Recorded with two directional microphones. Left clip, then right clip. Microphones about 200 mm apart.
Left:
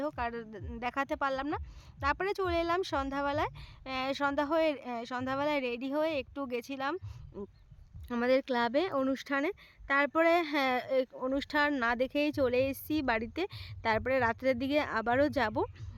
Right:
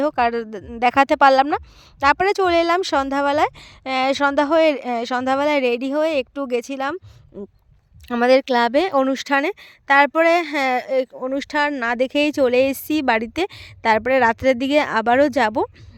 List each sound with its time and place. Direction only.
0.0 s speech: 45° right (ahead or behind)
7.3 s speech: 30° right (ahead or behind)
8.0 s speech: 45° right (ahead or behind)